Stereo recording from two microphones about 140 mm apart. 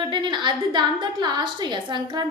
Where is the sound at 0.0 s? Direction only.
35° right (ahead or behind).